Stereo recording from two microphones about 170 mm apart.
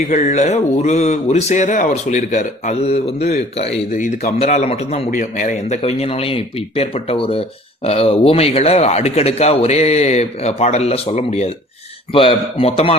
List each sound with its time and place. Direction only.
0.1 s a man's voice: 45° left (ahead or behind)